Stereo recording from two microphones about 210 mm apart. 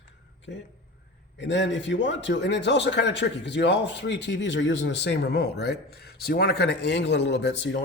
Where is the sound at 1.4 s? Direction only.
60° left (ahead or behind).